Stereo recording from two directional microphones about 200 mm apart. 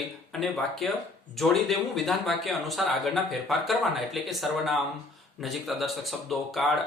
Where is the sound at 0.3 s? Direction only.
Centre (ahead or behind).